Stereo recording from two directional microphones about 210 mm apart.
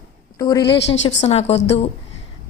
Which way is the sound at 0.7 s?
60° left (ahead or behind).